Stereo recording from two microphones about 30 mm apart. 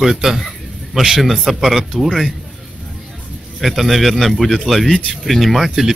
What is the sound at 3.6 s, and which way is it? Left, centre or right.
Speech, centre.